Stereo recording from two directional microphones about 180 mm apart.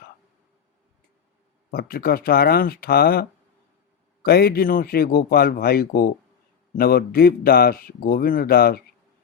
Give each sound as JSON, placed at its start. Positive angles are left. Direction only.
{"t": 1.7, "sound": "a man's voice", "side_deg": 55}